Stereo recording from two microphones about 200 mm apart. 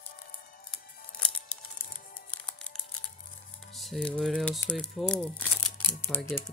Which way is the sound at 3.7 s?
Centre (ahead or behind).